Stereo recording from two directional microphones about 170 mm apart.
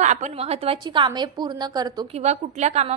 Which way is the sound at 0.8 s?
25° right (ahead or behind).